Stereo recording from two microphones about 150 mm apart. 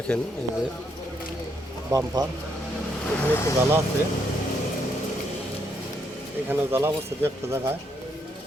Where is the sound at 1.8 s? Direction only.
25° right (ahead or behind).